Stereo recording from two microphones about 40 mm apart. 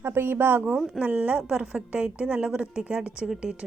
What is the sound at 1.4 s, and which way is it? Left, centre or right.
A woman's voice, right.